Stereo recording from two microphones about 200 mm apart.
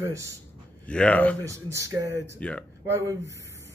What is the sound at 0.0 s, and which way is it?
Speech, 15° right (ahead or behind).